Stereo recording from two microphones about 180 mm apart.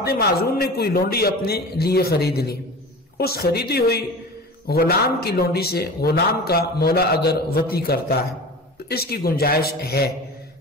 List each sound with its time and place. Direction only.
0.0 s a man's voice: 60° left (ahead or behind)